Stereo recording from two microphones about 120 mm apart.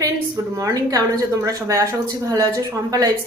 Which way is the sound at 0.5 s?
30° right (ahead or behind).